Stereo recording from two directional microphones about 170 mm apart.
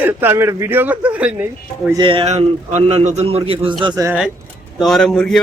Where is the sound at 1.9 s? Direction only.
30° right (ahead or behind).